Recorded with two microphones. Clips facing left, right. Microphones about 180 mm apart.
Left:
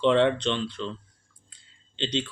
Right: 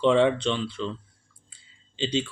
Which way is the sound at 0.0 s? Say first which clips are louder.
Right 1 dB; 5° right (ahead or behind).